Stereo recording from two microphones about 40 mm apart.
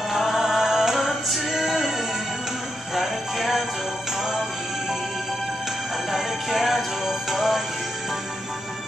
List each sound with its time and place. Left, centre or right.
0.1 s music: centre
2.9 s music: centre
6.1 s music: centre